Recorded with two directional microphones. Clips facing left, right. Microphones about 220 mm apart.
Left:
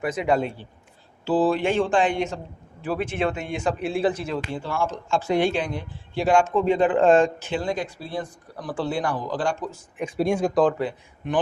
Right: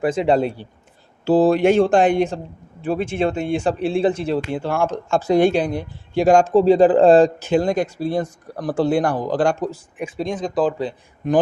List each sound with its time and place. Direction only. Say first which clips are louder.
0.0 s speech: right 5 dB; 30° right (ahead or behind)
1.2 s speech: right 6 dB; 45° right (ahead or behind); by 4.4 s 25° right (ahead or behind)
4.5 s speech: right 6 dB; 55° right (ahead or behind)
10.2 s speech: left 3 dB; 10° left (ahead or behind)
10.5 s speech: right 3 dB; 5° right (ahead or behind)
10.8 s speech: right 2 dB; 35° right (ahead or behind)